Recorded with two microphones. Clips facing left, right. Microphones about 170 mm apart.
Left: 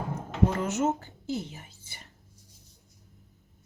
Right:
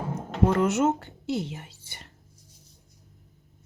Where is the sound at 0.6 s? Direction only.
70° right (ahead or behind).